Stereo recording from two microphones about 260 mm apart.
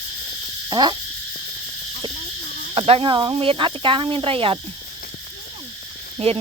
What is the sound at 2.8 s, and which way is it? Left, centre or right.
Speech, right.